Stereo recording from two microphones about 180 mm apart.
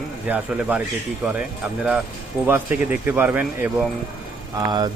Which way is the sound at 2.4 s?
10° right (ahead or behind).